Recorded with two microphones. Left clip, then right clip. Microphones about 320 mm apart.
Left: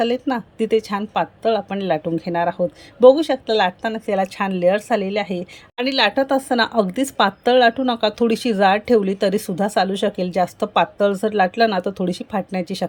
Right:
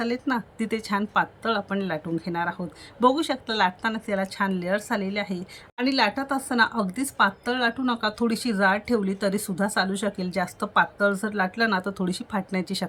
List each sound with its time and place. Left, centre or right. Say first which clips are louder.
0.0 s a woman's voice: left 7 dB; centre